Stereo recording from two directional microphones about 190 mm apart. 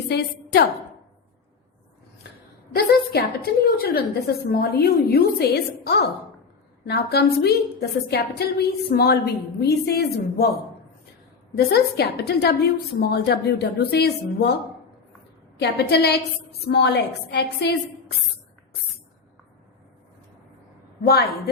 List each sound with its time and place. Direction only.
2.7 s a woman's voice: 55° left (ahead or behind)
11.5 s a woman's voice: 55° left (ahead or behind)
15.5 s a woman's voice: 60° left (ahead or behind)
21.1 s a woman's voice: 55° left (ahead or behind)